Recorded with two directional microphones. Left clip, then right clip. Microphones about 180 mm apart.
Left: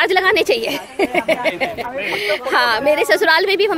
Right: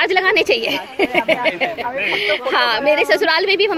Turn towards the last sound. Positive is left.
turn(degrees=10)  # may be behind; listen again after turning